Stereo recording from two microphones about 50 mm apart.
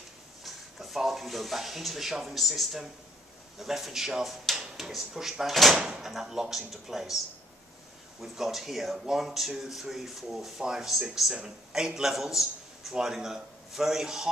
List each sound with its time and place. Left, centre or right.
0.4 s speech: centre
8.2 s speech: centre
8.9 s speech: centre
9.2 s a man's voice: centre